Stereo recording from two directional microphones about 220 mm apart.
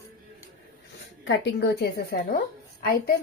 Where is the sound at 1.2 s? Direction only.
55° left (ahead or behind).